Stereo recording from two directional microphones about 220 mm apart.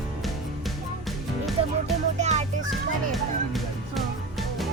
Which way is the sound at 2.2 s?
30° right (ahead or behind).